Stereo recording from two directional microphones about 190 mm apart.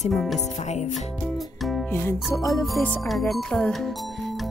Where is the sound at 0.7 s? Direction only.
40° left (ahead or behind).